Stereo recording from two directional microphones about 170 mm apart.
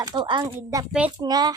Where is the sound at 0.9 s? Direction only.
10° right (ahead or behind).